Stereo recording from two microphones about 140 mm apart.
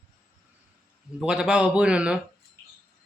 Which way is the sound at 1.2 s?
5° right (ahead or behind).